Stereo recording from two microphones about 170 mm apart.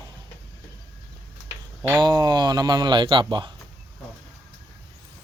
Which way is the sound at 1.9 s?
25° right (ahead or behind).